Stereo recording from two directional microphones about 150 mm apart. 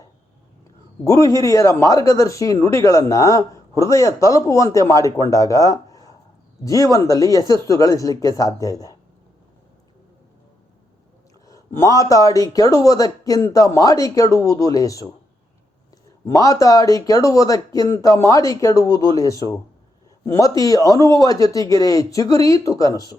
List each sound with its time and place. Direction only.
1.0 s speech: 20° left (ahead or behind)
11.4 s speech: 20° left (ahead or behind)
16.2 s speech: 20° left (ahead or behind)